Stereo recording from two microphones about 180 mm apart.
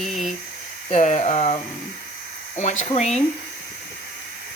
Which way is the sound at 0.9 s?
40° left (ahead or behind).